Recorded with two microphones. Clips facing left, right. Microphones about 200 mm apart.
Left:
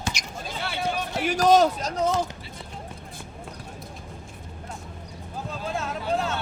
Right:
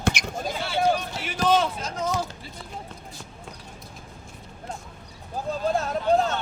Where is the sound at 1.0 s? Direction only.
50° left (ahead or behind).